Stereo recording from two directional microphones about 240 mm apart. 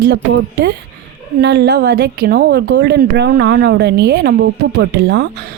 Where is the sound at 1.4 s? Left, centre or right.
Right.